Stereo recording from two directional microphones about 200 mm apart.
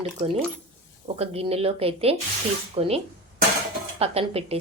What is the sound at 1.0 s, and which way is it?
Speech, 30° right (ahead or behind).